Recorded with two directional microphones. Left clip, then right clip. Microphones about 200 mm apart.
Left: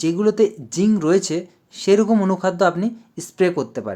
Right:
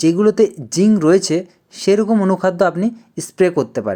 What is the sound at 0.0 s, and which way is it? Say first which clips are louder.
Speech: right 4 dB; 20° right (ahead or behind).